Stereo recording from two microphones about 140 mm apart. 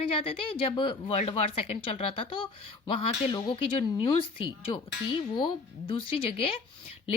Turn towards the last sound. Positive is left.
turn(degrees=40)  # may be behind; listen again after turning